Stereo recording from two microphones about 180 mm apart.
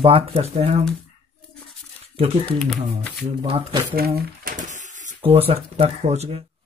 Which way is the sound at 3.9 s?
55° right (ahead or behind).